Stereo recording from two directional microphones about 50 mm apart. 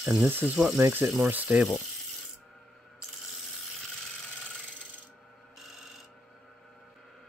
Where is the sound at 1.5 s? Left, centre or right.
Centre.